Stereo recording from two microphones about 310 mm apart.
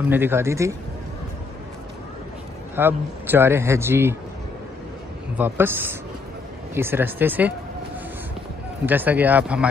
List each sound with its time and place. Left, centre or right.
0.1 s a man's voice: centre
2.7 s a man's voice: centre
5.4 s a man's voice: centre
8.8 s speech: centre